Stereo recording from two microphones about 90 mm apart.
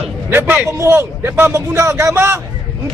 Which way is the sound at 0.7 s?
35° right (ahead or behind).